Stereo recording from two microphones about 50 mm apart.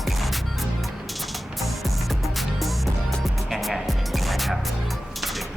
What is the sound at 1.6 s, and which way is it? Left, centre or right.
Music, centre.